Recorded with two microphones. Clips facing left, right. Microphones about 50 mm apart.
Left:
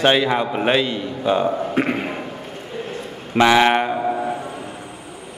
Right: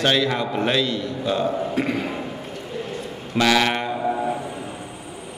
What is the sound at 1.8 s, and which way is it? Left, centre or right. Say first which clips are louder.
Speech: left 3 dB; left.